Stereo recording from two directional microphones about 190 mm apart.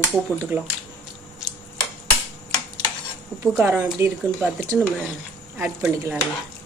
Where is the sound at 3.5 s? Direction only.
5° right (ahead or behind).